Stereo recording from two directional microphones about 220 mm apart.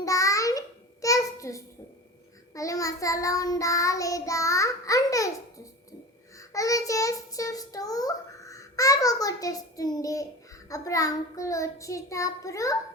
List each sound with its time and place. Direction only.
0.0 s a sound: 15° left (ahead or behind)
2.6 s a child's voice: 15° left (ahead or behind)
6.5 s a child's voice: 15° left (ahead or behind)